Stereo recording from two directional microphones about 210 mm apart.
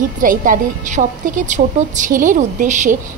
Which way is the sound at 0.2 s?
40° right (ahead or behind).